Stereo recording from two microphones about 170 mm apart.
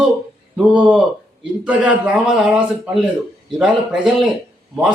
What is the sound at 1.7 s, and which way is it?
A man's voice, 5° right (ahead or behind).